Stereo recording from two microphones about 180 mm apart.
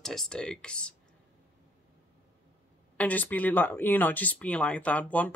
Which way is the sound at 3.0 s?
10° left (ahead or behind).